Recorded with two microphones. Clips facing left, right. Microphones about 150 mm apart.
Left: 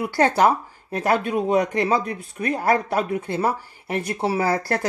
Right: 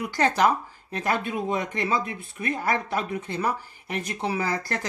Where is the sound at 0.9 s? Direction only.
45° left (ahead or behind).